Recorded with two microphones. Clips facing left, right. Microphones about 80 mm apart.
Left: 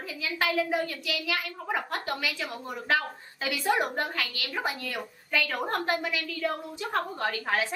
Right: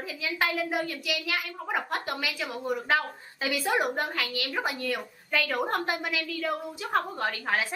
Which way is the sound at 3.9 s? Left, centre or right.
Centre.